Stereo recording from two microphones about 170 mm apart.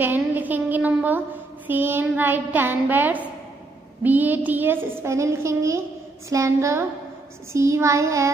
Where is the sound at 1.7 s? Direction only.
10° right (ahead or behind).